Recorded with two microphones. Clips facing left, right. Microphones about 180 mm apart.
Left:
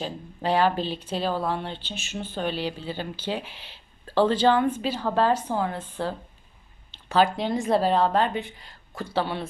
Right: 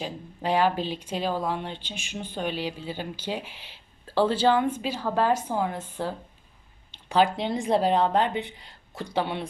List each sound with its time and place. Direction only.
0.0 s a woman's voice: 10° right (ahead or behind)
6.9 s a sound: 15° right (ahead or behind)
7.3 s a woman's voice: 20° right (ahead or behind)